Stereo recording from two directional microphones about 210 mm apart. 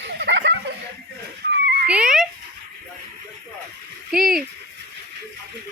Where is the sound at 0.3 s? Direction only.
60° right (ahead or behind).